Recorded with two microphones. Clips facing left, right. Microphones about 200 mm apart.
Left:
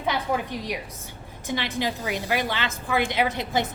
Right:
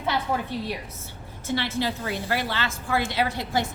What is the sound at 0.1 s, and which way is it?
A woman's voice, 15° left (ahead or behind).